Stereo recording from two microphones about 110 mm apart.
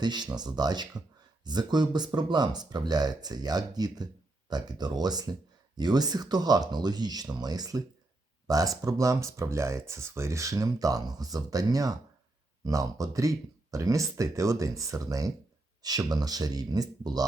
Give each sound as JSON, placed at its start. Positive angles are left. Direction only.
{"t": 0.0, "sound": "speech", "side_deg": -40}